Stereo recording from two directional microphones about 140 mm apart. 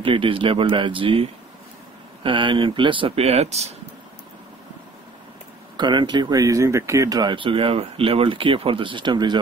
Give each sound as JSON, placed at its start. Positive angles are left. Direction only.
{"t": 0.0, "sound": "speech", "side_deg": -40}
{"t": 5.8, "sound": "speech", "side_deg": -35}